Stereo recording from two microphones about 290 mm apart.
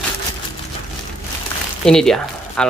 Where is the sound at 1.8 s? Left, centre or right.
Centre.